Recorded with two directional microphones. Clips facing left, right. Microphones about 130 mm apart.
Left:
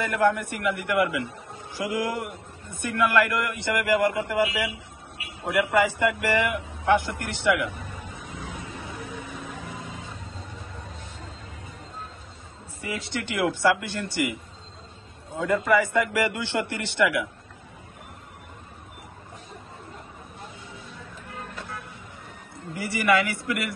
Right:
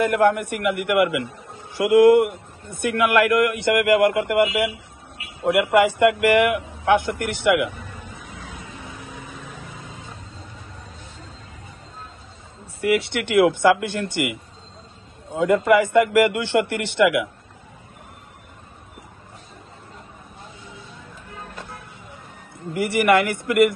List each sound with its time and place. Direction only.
0.2 s a man's voice: 55° right (ahead or behind)
12.8 s a man's voice: 70° right (ahead or behind)
15.6 s a man's voice: 60° right (ahead or behind)
22.8 s a man's voice: 55° right (ahead or behind)